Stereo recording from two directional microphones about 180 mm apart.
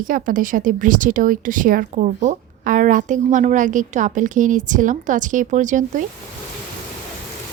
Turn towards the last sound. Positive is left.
turn(degrees=-45)  # may be behind; listen again after turning